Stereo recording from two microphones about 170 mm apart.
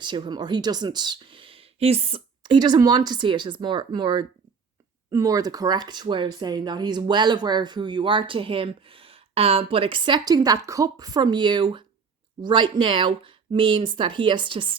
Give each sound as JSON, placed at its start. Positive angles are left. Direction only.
{"t": 0.0, "sound": "speech", "side_deg": -25}